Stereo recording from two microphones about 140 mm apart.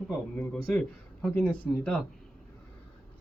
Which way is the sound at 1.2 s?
10° left (ahead or behind).